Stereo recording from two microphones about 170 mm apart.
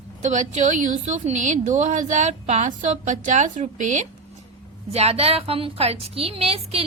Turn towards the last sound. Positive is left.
turn(degrees=-35)  # may be behind; listen again after turning